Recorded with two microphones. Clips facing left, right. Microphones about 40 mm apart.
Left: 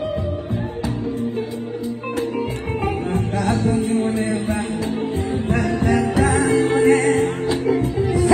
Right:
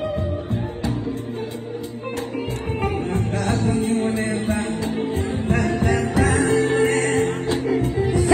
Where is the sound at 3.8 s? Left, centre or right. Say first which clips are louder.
Left 1 dB; right.